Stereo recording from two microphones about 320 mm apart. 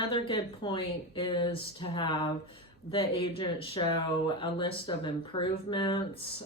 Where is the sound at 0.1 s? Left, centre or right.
Centre.